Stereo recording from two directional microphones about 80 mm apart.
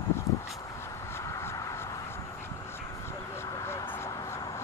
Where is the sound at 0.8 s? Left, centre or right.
Left.